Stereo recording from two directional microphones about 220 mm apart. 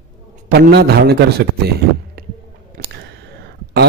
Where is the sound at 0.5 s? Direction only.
45° right (ahead or behind).